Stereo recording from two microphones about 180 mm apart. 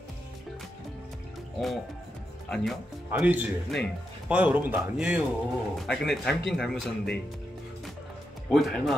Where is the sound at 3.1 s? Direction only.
10° right (ahead or behind).